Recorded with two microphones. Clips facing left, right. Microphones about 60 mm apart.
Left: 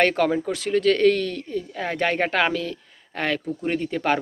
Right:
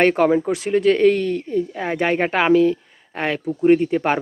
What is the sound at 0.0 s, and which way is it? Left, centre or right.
Speech, centre.